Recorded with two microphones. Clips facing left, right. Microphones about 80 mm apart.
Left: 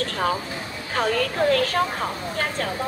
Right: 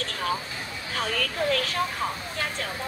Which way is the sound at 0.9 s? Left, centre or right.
Left.